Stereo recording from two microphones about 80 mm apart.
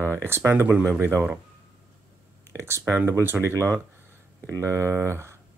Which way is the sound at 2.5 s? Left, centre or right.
Right.